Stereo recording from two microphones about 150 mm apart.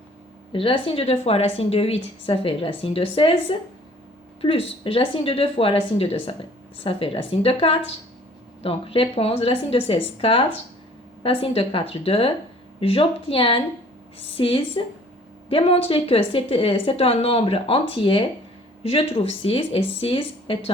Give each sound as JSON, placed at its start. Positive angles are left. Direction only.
{"t": 0.5, "sound": "a woman's voice", "side_deg": 35}